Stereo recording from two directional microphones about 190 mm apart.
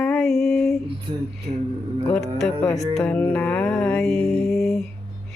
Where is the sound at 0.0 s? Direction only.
Centre (ahead or behind).